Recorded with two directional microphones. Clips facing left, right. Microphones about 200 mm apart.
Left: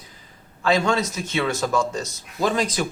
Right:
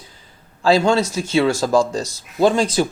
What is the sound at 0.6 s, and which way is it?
A man's voice, 30° right (ahead or behind).